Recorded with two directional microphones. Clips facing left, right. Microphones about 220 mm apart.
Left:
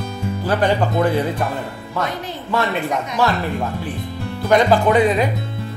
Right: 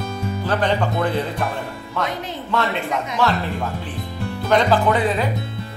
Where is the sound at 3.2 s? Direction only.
5° left (ahead or behind).